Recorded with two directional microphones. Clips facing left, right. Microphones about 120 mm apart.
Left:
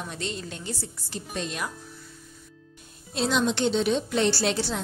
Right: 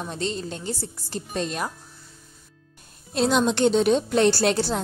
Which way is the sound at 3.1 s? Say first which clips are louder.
Right 4 dB; 45° right (ahead or behind).